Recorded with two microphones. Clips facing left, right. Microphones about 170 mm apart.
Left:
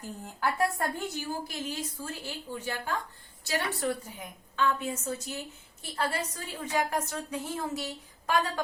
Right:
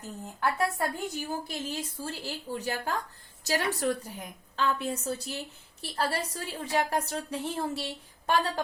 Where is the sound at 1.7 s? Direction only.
30° right (ahead or behind).